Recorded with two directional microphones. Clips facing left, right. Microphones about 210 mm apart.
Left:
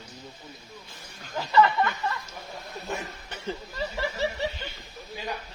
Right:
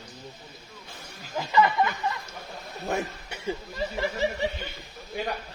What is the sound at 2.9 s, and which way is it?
Speech, 60° right (ahead or behind).